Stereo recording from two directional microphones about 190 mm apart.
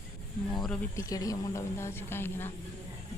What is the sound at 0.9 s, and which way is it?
Speech, 15° left (ahead or behind).